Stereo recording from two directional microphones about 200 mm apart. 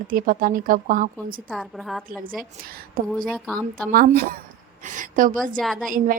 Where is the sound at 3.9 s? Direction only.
45° right (ahead or behind).